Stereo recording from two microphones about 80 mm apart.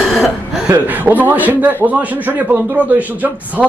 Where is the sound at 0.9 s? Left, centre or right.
Right.